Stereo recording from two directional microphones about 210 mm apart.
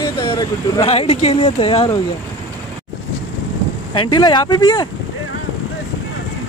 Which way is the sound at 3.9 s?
20° left (ahead or behind).